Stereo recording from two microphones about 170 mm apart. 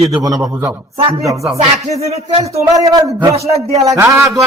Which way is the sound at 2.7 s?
20° right (ahead or behind).